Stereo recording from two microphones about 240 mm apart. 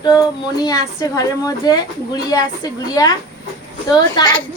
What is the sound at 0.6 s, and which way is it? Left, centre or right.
A child's voice, centre.